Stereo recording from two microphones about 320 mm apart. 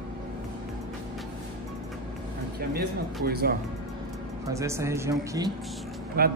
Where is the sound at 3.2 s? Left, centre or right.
Right.